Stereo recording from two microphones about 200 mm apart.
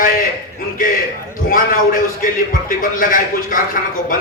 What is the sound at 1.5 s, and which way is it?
A man's voice, 40° left (ahead or behind).